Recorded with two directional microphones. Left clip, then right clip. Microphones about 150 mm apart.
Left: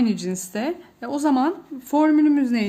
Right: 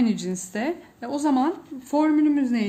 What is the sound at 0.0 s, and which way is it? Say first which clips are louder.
Speech: left 1 dB; 20° left (ahead or behind).